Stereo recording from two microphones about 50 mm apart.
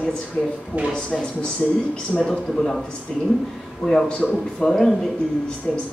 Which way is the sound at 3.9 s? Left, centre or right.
Centre.